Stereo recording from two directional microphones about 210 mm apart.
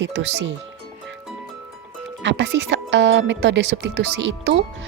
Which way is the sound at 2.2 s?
60° right (ahead or behind).